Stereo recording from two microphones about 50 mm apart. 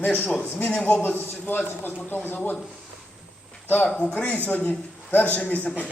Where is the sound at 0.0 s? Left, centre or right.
Left.